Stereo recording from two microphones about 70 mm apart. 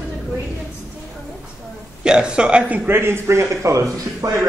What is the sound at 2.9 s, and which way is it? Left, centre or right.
A man's voice, right.